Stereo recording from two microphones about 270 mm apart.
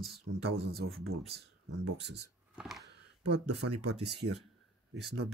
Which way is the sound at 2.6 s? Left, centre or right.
Centre.